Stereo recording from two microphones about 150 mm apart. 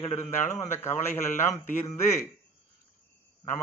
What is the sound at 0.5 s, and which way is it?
Mantra, 15° left (ahead or behind).